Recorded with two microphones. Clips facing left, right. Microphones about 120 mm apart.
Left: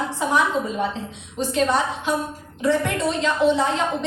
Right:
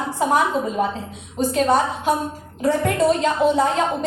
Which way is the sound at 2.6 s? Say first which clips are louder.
Right 3 dB; 45° right (ahead or behind).